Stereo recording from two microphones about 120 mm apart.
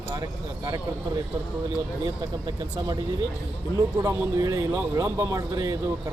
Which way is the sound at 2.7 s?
35° right (ahead or behind).